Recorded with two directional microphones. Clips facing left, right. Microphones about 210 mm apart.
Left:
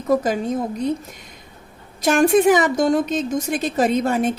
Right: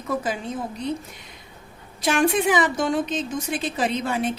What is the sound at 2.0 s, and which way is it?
Speech, 45° left (ahead or behind).